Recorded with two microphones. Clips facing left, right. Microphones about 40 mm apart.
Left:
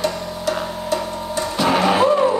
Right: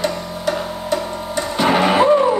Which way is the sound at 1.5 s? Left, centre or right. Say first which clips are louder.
Right 2 dB; right.